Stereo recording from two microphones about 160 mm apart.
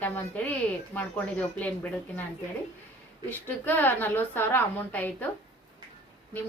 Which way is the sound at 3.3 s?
10° left (ahead or behind).